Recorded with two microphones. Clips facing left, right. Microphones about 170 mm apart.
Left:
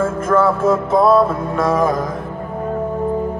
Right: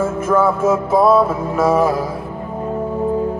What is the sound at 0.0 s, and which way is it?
Music, 5° right (ahead or behind).